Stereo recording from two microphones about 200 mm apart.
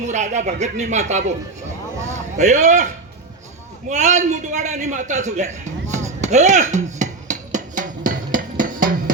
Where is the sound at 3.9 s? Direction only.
35° right (ahead or behind).